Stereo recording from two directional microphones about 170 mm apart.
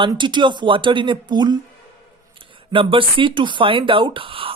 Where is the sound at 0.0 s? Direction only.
30° right (ahead or behind).